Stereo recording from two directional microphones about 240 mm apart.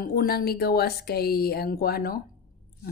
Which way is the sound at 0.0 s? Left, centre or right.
Left.